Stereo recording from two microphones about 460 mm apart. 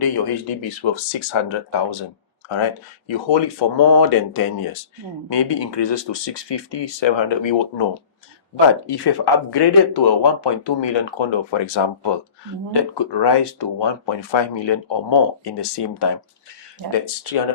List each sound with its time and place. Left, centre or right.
0.0 s speech: left
0.8 s speech: left
2.5 s speech: left
5.3 s speech: left
8.6 s speech: left
16.9 s speech: left